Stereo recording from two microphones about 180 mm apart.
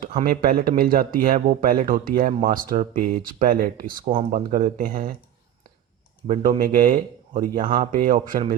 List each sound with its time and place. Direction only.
0.3 s speech: 55° right (ahead or behind)
4.1 s speech: 40° right (ahead or behind)
6.2 s speech: 45° right (ahead or behind)